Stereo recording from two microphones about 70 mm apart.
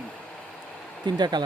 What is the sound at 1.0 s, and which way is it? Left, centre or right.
Speech, right.